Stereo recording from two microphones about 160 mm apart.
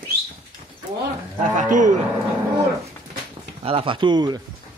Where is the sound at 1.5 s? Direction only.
55° right (ahead or behind).